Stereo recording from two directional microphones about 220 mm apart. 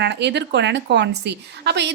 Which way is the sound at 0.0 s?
50° right (ahead or behind).